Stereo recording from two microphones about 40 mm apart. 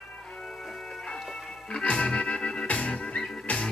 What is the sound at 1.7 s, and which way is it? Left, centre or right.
Music, left.